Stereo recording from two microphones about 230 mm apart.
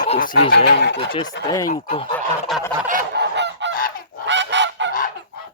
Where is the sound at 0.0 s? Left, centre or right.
Left.